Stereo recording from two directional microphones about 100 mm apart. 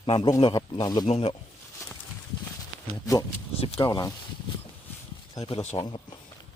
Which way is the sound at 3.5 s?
75° left (ahead or behind).